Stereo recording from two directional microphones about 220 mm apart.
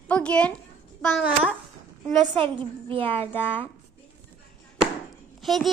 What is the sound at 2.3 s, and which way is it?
Speech, 25° right (ahead or behind).